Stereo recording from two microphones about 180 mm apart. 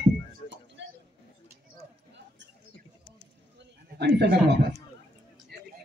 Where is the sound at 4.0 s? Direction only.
70° right (ahead or behind).